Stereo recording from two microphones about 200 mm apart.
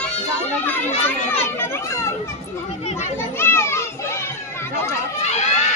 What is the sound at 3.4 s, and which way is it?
Children playing, 10° left (ahead or behind).